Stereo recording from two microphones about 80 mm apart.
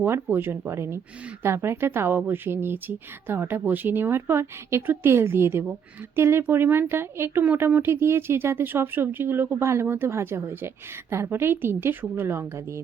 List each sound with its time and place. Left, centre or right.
0.0 s speech: right